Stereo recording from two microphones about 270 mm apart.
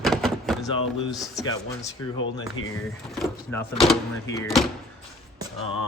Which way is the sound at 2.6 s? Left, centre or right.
Left.